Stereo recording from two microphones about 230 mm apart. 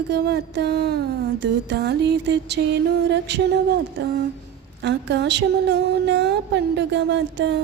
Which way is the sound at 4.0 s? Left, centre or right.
Right.